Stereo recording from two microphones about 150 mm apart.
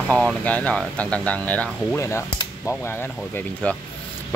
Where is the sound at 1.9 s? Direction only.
20° left (ahead or behind).